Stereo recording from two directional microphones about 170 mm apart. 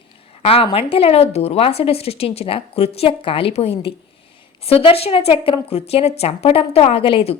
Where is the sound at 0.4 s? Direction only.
35° left (ahead or behind).